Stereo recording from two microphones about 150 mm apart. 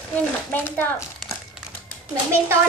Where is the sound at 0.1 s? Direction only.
10° left (ahead or behind).